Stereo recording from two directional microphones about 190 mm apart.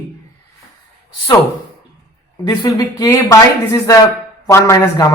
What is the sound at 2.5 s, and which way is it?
Speech, 20° left (ahead or behind).